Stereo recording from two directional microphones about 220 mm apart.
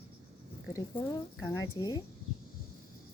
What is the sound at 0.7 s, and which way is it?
Speech, 15° left (ahead or behind).